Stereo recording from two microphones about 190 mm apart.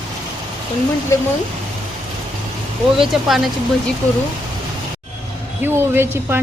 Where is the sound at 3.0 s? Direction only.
Centre (ahead or behind).